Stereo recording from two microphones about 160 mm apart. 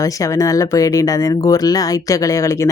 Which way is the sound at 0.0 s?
20° left (ahead or behind).